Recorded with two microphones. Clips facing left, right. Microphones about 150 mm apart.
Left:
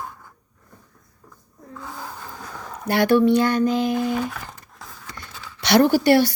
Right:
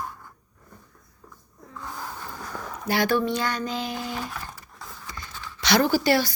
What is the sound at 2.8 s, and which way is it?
Speech, 65° left (ahead or behind).